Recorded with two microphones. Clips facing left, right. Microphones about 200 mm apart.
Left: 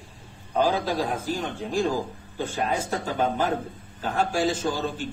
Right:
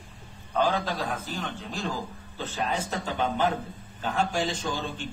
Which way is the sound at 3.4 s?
45° left (ahead or behind).